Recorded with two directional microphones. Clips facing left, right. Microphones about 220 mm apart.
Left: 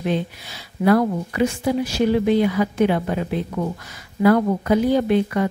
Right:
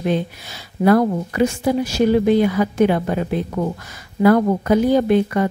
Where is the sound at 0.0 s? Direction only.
45° right (ahead or behind).